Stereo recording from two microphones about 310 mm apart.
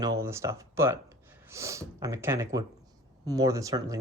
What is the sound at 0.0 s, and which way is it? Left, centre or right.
Speech, centre.